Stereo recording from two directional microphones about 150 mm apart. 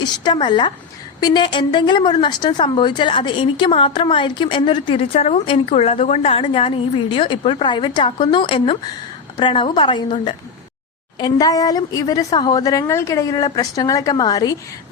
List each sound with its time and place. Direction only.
0.0 s a woman's voice: 30° left (ahead or behind)